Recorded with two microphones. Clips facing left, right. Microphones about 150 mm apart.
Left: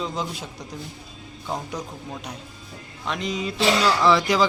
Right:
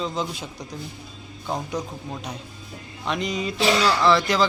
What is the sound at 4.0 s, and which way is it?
Speech, 10° left (ahead or behind).